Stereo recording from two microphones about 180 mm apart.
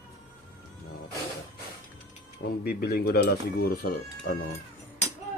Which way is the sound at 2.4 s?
60° left (ahead or behind).